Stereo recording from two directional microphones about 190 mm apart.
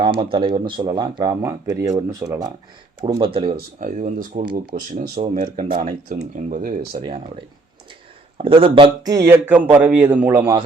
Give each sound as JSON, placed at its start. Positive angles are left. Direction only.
{"t": 0.0, "sound": "speech", "side_deg": -25}
{"t": 3.8, "sound": "speech", "side_deg": -40}
{"t": 8.4, "sound": "a man's voice", "side_deg": -30}